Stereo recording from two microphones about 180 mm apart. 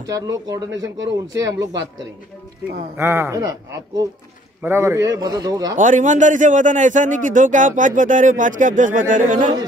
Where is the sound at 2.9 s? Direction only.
15° right (ahead or behind).